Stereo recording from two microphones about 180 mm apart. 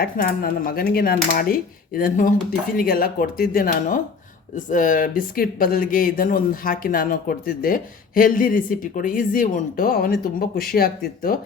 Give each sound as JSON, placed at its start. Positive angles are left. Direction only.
{"t": 0.0, "sound": "speech", "side_deg": 55}